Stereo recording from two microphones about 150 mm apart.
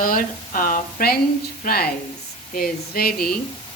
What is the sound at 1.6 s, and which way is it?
Speech, 90° left.